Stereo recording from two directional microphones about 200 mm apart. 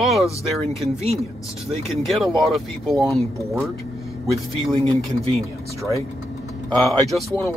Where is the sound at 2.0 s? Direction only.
Centre (ahead or behind).